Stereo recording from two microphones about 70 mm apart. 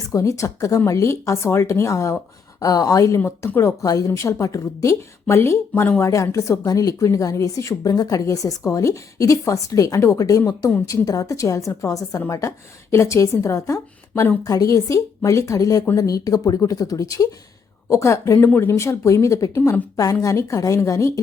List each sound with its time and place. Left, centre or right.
0.1 s a woman's voice: left
2.6 s speech: left
3.2 s speech: left
3.8 s speech: left
4.1 s a woman's voice: left
5.3 s a woman's voice: left
18.8 s a woman's voice: left